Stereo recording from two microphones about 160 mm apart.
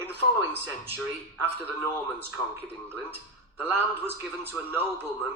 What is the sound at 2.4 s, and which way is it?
Speech, 15° left (ahead or behind).